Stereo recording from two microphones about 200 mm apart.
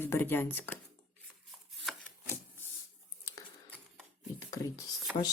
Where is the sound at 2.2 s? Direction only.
15° left (ahead or behind).